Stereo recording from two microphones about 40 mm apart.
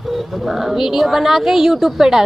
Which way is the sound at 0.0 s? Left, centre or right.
Centre.